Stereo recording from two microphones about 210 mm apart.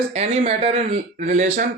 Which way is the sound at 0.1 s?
30° right (ahead or behind).